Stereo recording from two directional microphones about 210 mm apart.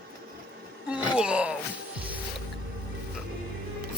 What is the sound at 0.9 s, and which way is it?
Gasp, 5° right (ahead or behind).